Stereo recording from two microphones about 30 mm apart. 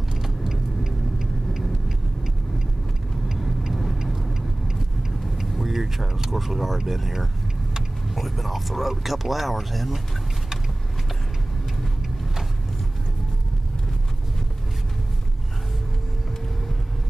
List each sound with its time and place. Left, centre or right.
0.2 s vehicle: centre
3.7 s vehicle: centre
5.4 s vehicle: centre
7.7 s speech: centre